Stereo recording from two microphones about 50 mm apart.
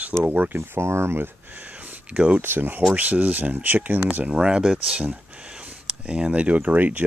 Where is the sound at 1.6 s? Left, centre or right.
Right.